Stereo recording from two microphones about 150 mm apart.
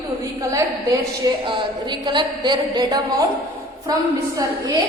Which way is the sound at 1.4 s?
30° right (ahead or behind).